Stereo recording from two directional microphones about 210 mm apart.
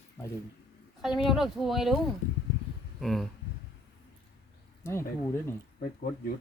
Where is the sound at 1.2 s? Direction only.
Centre (ahead or behind).